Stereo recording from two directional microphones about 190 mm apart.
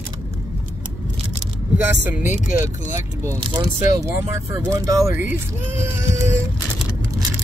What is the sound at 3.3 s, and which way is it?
Speech, 25° right (ahead or behind).